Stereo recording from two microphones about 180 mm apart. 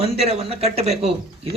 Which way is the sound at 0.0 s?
35° right (ahead or behind).